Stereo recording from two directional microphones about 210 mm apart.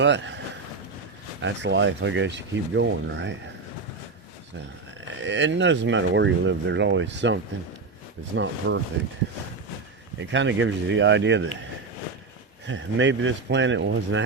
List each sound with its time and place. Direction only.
0.0 s speech: 60° right (ahead or behind)
1.4 s speech: 60° right (ahead or behind)
5.2 s speech: 60° right (ahead or behind)
8.4 s speech: 60° right (ahead or behind)
10.2 s speech: 60° right (ahead or behind)
12.6 s speech: 60° right (ahead or behind)